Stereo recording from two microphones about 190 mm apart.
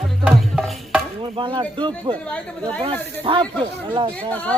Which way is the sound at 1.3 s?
25° right (ahead or behind).